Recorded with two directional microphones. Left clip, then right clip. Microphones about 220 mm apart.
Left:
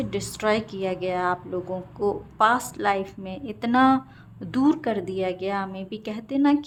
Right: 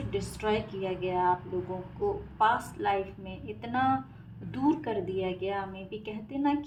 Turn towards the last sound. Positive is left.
turn(degrees=45)  # may be behind; listen again after turning